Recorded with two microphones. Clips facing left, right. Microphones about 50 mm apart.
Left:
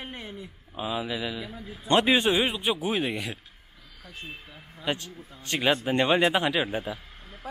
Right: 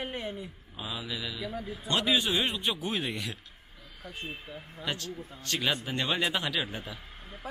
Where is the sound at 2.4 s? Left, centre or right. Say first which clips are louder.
Left 4 dB; centre.